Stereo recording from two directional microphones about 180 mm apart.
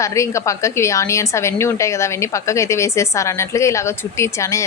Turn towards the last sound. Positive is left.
turn(degrees=15)  # may be behind; listen again after turning